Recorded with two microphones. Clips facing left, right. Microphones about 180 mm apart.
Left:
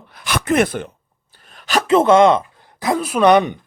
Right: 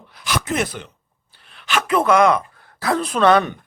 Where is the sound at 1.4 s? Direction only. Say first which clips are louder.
Left 3 dB; 45° left (ahead or behind).